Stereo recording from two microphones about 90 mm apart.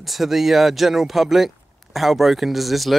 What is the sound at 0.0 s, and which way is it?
Speech, centre (ahead or behind).